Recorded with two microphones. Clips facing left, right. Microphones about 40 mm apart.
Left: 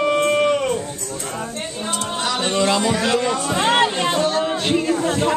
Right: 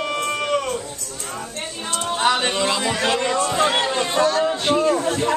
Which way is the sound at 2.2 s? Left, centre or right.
Right.